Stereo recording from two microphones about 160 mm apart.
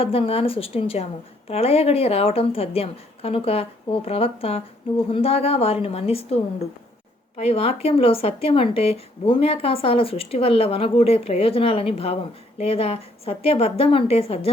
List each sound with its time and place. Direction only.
0.0 s speech: 35° left (ahead or behind)